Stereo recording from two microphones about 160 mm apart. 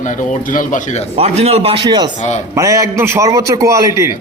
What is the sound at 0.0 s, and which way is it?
Speech, 50° left (ahead or behind).